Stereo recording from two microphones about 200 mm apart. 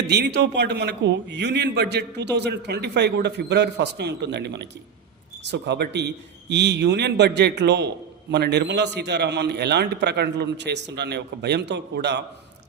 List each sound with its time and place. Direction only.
0.1 s a man's voice: 55° right (ahead or behind)